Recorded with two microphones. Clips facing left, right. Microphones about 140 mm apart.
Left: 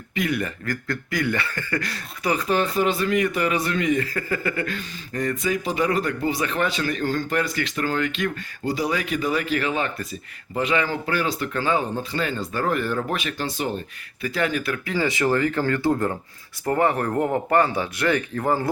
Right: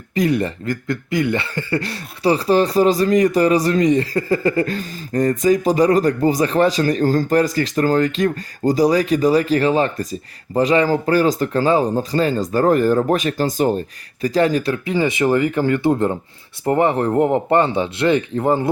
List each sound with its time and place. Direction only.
0.1 s speech: 35° right (ahead or behind)
14.8 s speech: 20° right (ahead or behind)